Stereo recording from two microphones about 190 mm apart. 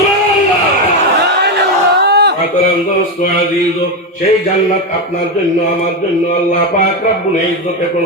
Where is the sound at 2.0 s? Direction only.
60° right (ahead or behind).